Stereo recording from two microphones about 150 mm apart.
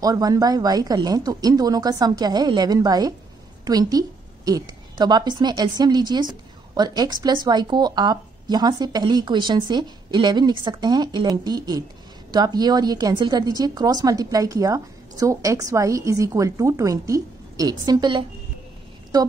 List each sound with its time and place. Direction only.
0.0 s a woman's voice: 25° right (ahead or behind)